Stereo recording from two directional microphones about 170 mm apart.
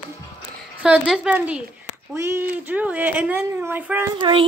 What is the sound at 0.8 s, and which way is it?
Speech, 5° right (ahead or behind).